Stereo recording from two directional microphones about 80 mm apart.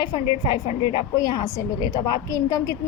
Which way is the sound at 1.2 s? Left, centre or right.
Left.